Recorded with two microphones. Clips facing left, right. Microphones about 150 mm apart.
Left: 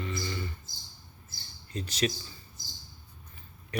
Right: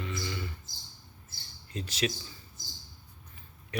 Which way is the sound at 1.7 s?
Centre (ahead or behind).